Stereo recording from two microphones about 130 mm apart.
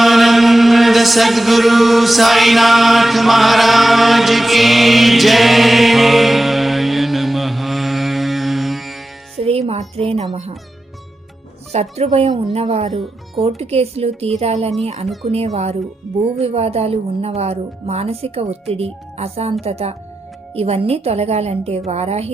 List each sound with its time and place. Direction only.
0.0 s chant: centre (ahead or behind)
9.4 s music: 50° right (ahead or behind)
11.7 s a woman's voice: 55° right (ahead or behind)